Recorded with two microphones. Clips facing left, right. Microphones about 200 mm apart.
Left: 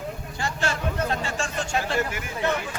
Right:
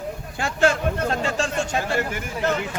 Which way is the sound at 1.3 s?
40° right (ahead or behind).